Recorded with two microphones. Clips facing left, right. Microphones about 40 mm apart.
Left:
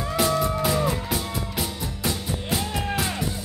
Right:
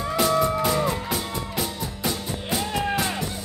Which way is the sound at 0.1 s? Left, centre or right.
Centre.